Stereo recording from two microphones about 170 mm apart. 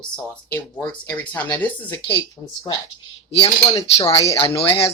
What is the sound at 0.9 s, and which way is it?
Speech, 10° left (ahead or behind).